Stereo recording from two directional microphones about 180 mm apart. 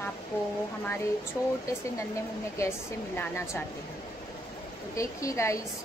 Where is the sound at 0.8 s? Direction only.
15° left (ahead or behind).